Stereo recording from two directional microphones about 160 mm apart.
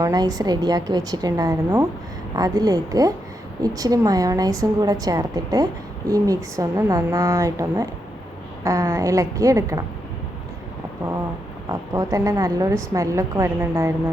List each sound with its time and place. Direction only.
0.0 s a woman's voice: 25° right (ahead or behind)
11.7 s a woman's voice: 20° right (ahead or behind)